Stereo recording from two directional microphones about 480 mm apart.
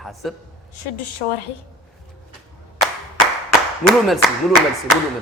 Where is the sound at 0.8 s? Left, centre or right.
Left.